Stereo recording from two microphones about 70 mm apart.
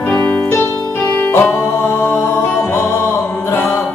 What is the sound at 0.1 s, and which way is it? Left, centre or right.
Music, left.